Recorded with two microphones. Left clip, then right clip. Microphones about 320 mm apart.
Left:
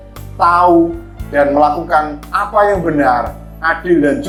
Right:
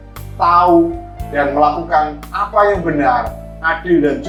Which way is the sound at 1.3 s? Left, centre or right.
Left.